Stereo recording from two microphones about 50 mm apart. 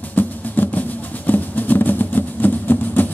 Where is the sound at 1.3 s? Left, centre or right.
Left.